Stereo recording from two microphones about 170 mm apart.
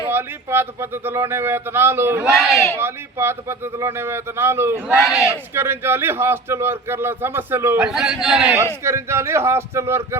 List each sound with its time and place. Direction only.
0.1 s speech: 15° right (ahead or behind)
2.4 s a man's voice: centre (ahead or behind)
2.7 s speech: 15° right (ahead or behind)
5.0 s a man's voice: 5° right (ahead or behind)
5.5 s a man's voice: 15° right (ahead or behind)
8.8 s speech: 15° right (ahead or behind)